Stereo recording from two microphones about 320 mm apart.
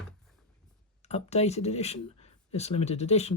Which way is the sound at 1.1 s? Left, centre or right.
Centre.